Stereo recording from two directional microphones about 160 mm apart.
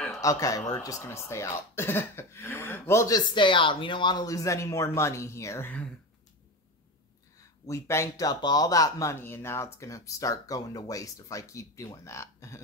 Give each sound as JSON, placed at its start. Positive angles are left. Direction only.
{"t": 0.2, "sound": "speech", "side_deg": 20}
{"t": 7.6, "sound": "speech", "side_deg": 20}